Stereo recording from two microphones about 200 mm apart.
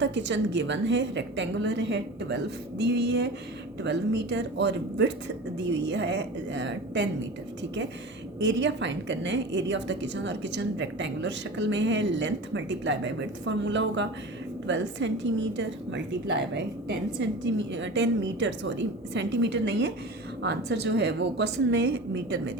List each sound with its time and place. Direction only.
0.0 s a woman's voice: 65° right (ahead or behind)
8.4 s a woman's voice: 60° right (ahead or behind)